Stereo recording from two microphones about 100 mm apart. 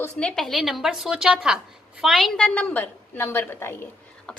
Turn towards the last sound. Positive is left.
turn(degrees=5)  # may be behind; listen again after turning